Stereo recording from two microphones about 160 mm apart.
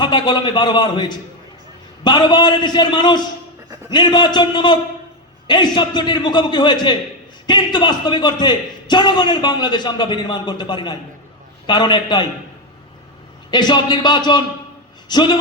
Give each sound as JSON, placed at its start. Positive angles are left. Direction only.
{"t": 0.0, "sound": "a man's voice", "side_deg": 25}
{"t": 13.5, "sound": "a man's voice", "side_deg": 25}